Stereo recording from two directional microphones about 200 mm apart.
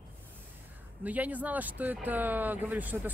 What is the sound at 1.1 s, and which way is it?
Speech, 10° right (ahead or behind).